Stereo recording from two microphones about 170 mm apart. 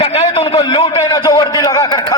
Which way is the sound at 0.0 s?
35° left (ahead or behind).